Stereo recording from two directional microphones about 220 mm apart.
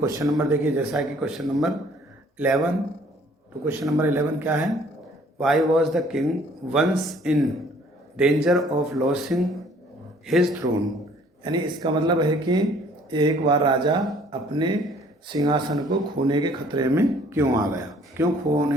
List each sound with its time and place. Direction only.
0.0 s a man's voice: 15° right (ahead or behind); by 10.6 s centre (ahead or behind)
11.4 s speech: 20° right (ahead or behind)